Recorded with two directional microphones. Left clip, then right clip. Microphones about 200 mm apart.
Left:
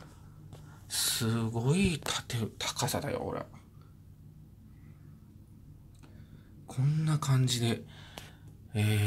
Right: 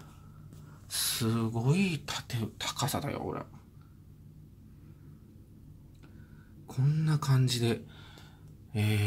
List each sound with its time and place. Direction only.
0.8 s speech: centre (ahead or behind)
6.7 s speech: centre (ahead or behind)
8.7 s a sound: centre (ahead or behind)